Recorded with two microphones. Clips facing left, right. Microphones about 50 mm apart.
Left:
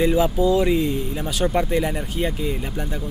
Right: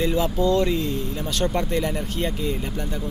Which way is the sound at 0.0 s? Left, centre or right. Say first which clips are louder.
Left 3 dB; centre.